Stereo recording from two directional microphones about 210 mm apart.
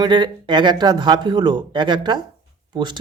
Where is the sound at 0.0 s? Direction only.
20° right (ahead or behind).